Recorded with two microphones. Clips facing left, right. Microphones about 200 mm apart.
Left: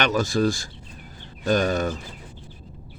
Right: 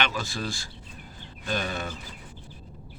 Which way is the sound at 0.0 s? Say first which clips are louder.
Left 9 dB; 45° left (ahead or behind).